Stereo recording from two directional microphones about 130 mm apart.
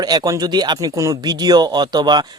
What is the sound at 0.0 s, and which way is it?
A man's voice, 30° right (ahead or behind).